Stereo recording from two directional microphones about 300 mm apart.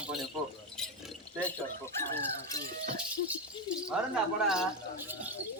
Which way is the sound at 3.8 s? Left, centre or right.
Centre.